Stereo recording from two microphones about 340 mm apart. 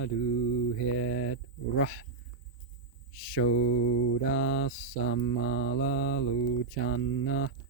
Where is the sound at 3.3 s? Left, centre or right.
Left.